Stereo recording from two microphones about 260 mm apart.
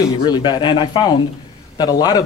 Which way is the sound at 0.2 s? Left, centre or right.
Centre.